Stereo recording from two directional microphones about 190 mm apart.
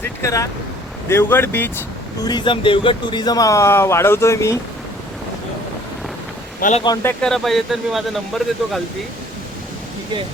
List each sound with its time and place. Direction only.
0.0 s speech: 15° left (ahead or behind)
2.2 s speech: 25° left (ahead or behind)
6.6 s speech: 40° left (ahead or behind)
6.8 s speech: 15° left (ahead or behind)